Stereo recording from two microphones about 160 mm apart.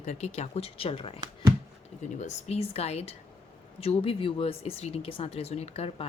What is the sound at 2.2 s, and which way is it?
Speech, 45° left (ahead or behind).